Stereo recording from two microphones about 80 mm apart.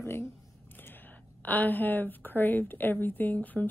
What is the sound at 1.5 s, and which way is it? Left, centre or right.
A woman's voice, left.